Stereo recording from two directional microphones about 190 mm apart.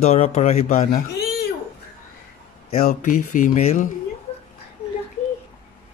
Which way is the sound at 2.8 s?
45° left (ahead or behind).